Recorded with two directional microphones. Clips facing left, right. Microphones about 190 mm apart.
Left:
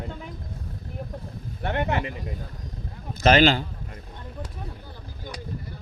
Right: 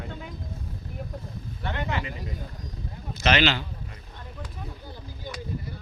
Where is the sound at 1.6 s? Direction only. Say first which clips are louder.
Left 5 dB; 50° left (ahead or behind).